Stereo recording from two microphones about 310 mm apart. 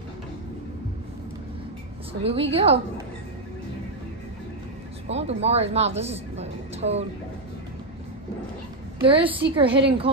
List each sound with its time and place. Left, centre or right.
2.2 s a woman's voice: centre
5.0 s a woman's voice: centre
9.0 s a woman's voice: centre